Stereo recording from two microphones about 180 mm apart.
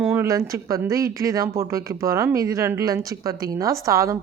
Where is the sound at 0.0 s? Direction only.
10° right (ahead or behind).